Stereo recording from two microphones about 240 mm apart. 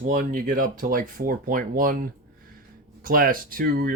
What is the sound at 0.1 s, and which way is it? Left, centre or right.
Speech, right.